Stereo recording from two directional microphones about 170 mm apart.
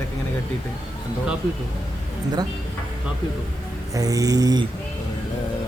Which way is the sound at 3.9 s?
20° right (ahead or behind).